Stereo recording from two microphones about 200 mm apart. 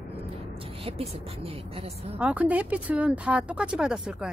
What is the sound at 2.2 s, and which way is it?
Speech, 5° right (ahead or behind).